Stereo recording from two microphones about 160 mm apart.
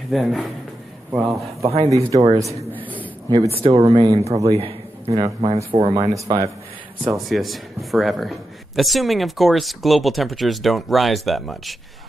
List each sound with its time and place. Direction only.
0.1 s speech: centre (ahead or behind)
1.1 s speech: 20° right (ahead or behind)
2.7 s a sound: 10° left (ahead or behind)
3.3 s speech: 35° right (ahead or behind)
4.6 s a sound: 35° right (ahead or behind)
5.1 s speech: 30° right (ahead or behind)
6.1 s speech: 20° right (ahead or behind)
7.2 s speech: centre (ahead or behind)